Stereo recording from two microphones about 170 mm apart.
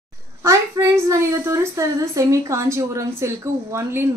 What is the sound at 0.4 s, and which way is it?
A woman's voice, 15° right (ahead or behind).